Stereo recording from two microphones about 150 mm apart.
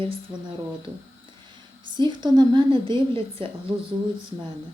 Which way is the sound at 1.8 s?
30° right (ahead or behind).